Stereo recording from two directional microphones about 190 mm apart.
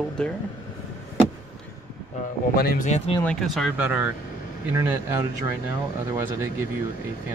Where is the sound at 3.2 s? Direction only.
5° left (ahead or behind).